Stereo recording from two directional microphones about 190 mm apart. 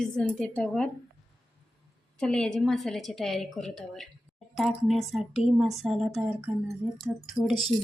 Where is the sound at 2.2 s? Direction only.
5° left (ahead or behind).